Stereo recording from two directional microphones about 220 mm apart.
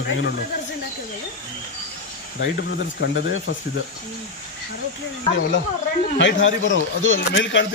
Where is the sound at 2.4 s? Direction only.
50° left (ahead or behind).